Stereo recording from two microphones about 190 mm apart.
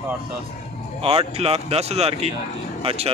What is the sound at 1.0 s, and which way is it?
Speech, 30° right (ahead or behind).